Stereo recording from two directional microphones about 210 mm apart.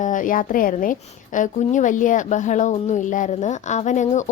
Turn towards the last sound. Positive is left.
turn(degrees=35)  # may be behind; listen again after turning